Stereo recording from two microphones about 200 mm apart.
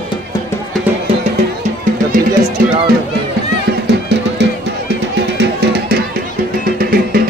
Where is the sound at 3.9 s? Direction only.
60° right (ahead or behind).